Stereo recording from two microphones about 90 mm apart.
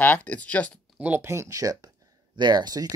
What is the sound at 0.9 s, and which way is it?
Speech, 15° right (ahead or behind).